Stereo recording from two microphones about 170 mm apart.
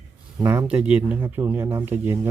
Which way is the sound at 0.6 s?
5° right (ahead or behind).